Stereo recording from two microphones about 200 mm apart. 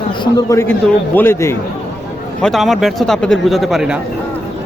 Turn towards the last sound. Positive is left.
turn(degrees=0)  # may be behind; listen again after turning